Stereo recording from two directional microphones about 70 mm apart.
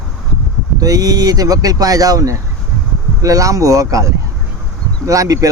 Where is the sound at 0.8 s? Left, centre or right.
Right.